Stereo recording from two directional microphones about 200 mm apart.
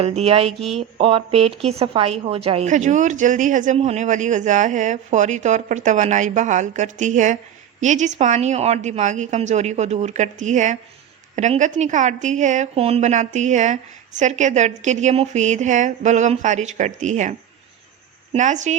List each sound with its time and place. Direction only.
0.0 s speech: 30° right (ahead or behind)
18.3 s speech: 35° right (ahead or behind)